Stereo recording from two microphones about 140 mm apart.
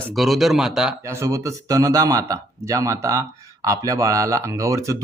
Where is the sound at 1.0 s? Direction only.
20° right (ahead or behind).